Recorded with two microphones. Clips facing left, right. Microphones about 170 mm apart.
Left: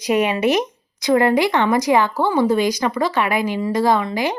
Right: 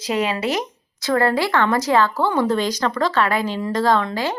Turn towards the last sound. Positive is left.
turn(degrees=10)  # may be behind; listen again after turning